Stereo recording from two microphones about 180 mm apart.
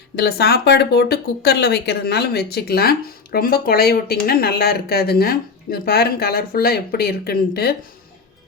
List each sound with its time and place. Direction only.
0.2 s speech: 65° left (ahead or behind)